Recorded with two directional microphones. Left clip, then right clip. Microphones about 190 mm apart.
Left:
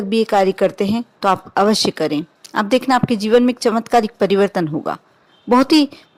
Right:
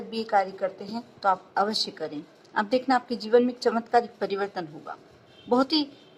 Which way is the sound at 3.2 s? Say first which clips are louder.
Left 8 dB; 35° left (ahead or behind).